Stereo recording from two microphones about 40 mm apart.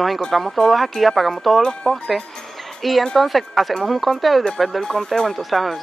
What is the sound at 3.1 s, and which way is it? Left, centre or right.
Speech, centre.